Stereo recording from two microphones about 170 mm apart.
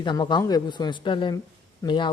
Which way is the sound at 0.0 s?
25° left (ahead or behind).